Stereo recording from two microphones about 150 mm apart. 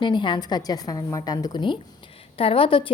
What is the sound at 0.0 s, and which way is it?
A woman's voice, 30° left (ahead or behind).